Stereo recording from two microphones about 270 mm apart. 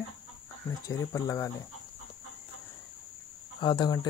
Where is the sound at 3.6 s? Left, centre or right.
Centre.